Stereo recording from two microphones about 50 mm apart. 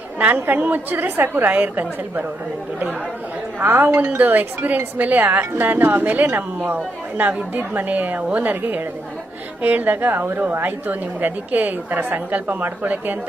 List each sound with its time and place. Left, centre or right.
0.2 s a woman's voice: right
3.6 s a woman's voice: right
10.6 s a woman's voice: right